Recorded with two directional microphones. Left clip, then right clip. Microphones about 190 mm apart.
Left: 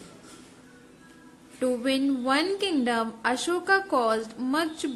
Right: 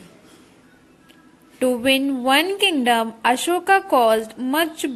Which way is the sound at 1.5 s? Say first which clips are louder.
Right 8 dB; 20° right (ahead or behind).